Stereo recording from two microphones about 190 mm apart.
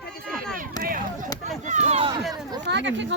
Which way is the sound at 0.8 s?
45° right (ahead or behind).